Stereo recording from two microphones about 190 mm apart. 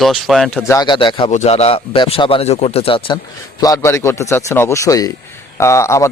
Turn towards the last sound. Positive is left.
turn(degrees=15)  # may be behind; listen again after turning